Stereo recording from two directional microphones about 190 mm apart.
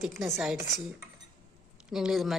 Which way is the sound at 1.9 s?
Centre (ahead or behind).